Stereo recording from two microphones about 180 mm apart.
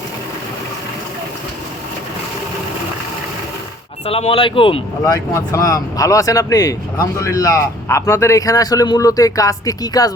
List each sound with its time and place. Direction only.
4.0 s speech: 30° left (ahead or behind)
5.3 s speech: 15° left (ahead or behind)